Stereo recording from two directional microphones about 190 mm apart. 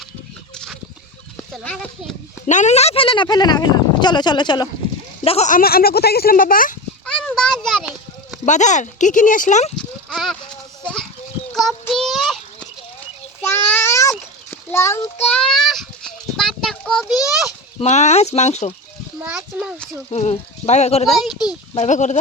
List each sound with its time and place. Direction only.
1.5 s a child's voice: 5° left (ahead or behind)
2.5 s speech: 40° left (ahead or behind); by 4.7 s 20° left (ahead or behind)
5.2 s speech: 35° left (ahead or behind)
7.0 s a sound: 5° left (ahead or behind)
8.4 s speech: 40° left (ahead or behind)
9.7 s a sound: 5° left (ahead or behind)
11.5 s child singing: centre (ahead or behind)
13.4 s a sound: 10° left (ahead or behind)
17.7 s speech: 35° left (ahead or behind)
19.2 s a child's voice: 5° right (ahead or behind)
20.1 s speech: 35° left (ahead or behind)